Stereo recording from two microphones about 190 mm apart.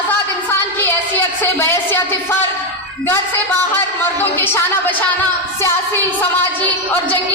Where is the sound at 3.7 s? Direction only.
10° left (ahead or behind).